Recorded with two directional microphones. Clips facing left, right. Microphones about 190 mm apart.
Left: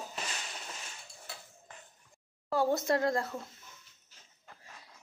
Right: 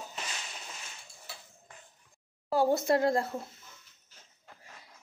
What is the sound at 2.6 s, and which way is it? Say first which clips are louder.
Speech: right 3 dB; 30° right (ahead or behind).